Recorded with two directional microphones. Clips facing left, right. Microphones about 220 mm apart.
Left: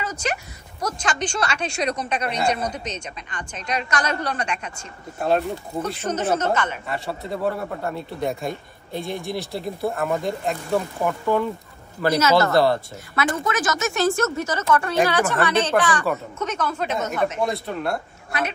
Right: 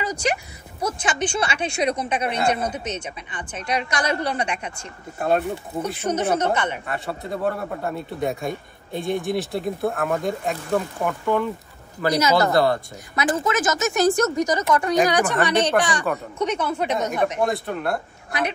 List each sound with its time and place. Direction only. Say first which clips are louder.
0.0 s a woman's voice: right 3 dB; 10° right (ahead or behind)
5.2 s a man's voice: even; centre (ahead or behind)
6.0 s a woman's voice: right 1 dB; 15° right (ahead or behind)
6.9 s a man's voice: even; centre (ahead or behind)
12.1 s a woman's voice: left 1 dB; 15° right (ahead or behind)
17.4 s a man's voice: right 1 dB; centre (ahead or behind)